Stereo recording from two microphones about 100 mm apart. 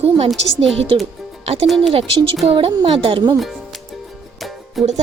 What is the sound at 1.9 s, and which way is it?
A woman's voice, 60° right (ahead or behind).